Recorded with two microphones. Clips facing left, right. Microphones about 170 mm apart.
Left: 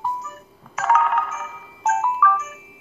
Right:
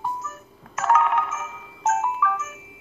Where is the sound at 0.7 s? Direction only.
Centre (ahead or behind).